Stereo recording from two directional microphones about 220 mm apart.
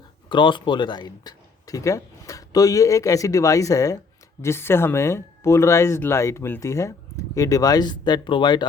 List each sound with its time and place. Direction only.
0.3 s speech: 20° left (ahead or behind)